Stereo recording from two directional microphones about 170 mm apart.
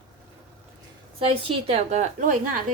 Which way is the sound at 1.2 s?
35° right (ahead or behind).